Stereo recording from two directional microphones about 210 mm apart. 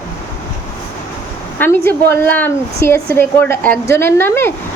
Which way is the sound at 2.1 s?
10° left (ahead or behind).